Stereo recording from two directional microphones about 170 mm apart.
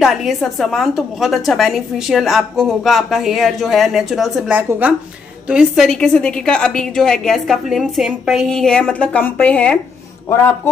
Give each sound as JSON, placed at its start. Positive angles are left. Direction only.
{"t": 0.0, "sound": "a woman's voice", "side_deg": 0}